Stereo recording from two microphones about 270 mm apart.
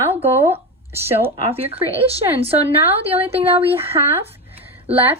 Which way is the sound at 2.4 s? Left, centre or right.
Right.